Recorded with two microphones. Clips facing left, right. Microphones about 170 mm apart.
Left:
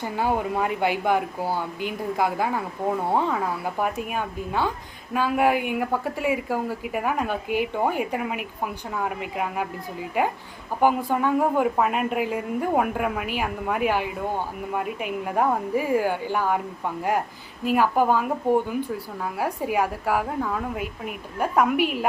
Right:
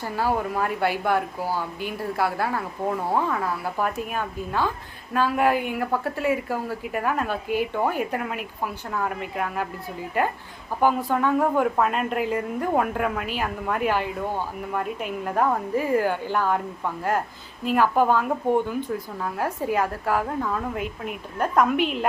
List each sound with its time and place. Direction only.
0.0 s speech: 20° left (ahead or behind)